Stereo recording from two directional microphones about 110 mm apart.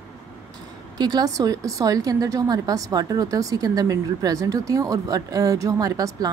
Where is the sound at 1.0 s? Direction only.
35° right (ahead or behind).